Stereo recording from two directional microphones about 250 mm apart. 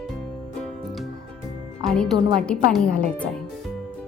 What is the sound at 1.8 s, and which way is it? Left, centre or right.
Speech, centre.